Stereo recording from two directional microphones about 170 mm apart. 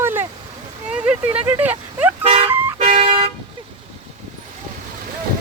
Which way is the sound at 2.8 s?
35° right (ahead or behind).